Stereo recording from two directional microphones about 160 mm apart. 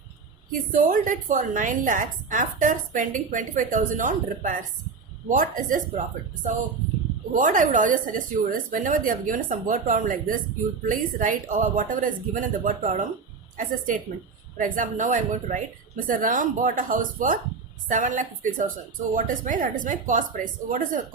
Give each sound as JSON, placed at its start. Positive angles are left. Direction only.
{"t": 0.7, "sound": "a woman's voice", "side_deg": -55}
{"t": 7.3, "sound": "a woman's voice", "side_deg": -55}